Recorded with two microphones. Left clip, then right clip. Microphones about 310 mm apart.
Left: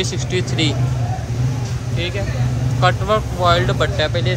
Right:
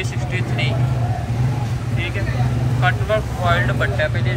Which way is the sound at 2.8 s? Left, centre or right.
Left.